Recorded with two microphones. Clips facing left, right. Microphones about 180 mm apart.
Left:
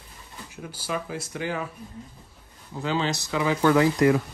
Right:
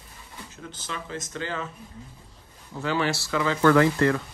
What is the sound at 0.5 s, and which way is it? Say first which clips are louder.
A man's voice: left 6 dB; 10° left (ahead or behind).